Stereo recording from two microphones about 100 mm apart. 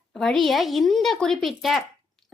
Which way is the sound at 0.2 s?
5° left (ahead or behind).